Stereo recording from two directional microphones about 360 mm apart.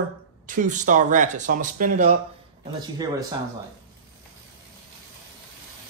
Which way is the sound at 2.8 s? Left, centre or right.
Centre.